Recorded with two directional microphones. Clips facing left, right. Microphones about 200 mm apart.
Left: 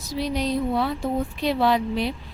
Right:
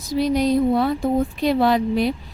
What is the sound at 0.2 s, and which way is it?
A woman's voice, 45° right (ahead or behind).